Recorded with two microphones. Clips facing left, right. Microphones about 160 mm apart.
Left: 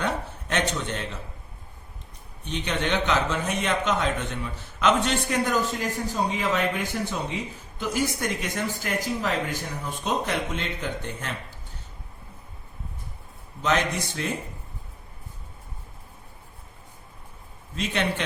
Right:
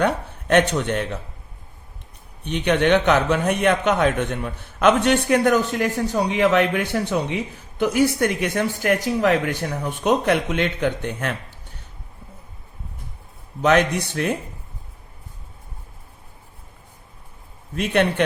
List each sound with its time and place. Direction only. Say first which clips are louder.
0.0 s speech: right 7 dB; 60° right (ahead or behind)
2.4 s a man's voice: right 9 dB; 60° right (ahead or behind)
13.6 s a man's voice: right 7 dB; 60° right (ahead or behind)
17.7 s a man's voice: right 8 dB; 60° right (ahead or behind)